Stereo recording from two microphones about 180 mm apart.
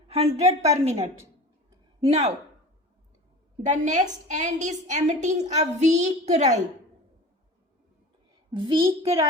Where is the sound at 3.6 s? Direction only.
45° right (ahead or behind).